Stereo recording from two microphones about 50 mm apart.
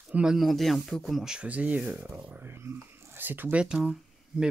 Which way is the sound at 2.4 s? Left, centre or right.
Right.